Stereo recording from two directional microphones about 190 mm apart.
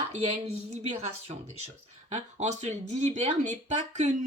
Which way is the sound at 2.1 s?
40° right (ahead or behind).